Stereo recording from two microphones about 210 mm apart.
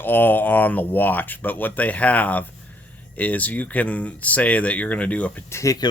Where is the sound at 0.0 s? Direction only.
10° left (ahead or behind).